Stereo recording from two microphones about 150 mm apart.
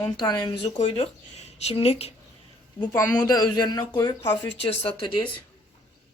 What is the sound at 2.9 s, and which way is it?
Speech, 15° left (ahead or behind).